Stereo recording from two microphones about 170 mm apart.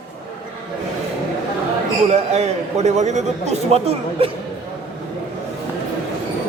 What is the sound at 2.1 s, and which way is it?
A man's voice, 40° right (ahead or behind).